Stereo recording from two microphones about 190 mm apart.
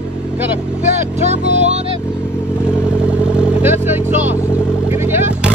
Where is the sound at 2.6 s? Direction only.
5° right (ahead or behind).